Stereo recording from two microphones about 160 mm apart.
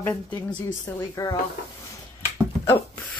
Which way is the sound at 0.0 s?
10° left (ahead or behind).